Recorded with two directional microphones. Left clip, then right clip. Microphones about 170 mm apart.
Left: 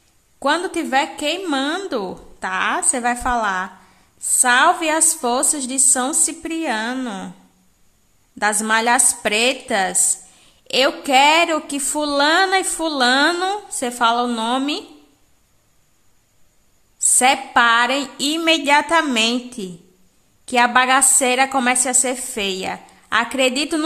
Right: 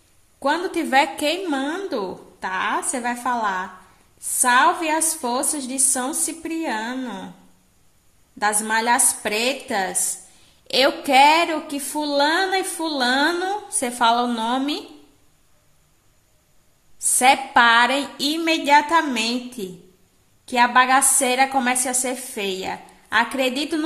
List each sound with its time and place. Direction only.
0.4 s a woman's voice: 15° left (ahead or behind)
0.8 s a woman's voice: 5° left (ahead or behind)
1.4 s a woman's voice: 20° left (ahead or behind)
7.0 s a woman's voice: 25° left (ahead or behind)
8.4 s a woman's voice: 15° left (ahead or behind)
13.7 s a woman's voice: 5° left (ahead or behind)
17.2 s a woman's voice: 10° left (ahead or behind)